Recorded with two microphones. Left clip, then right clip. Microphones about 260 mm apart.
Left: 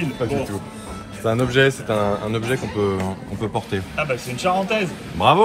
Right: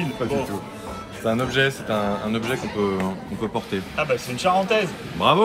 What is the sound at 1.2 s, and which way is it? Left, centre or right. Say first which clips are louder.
A man's voice: left 3 dB; left.